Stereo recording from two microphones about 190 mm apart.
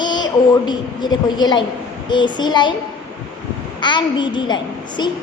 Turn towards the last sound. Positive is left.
turn(degrees=25)  # may be behind; listen again after turning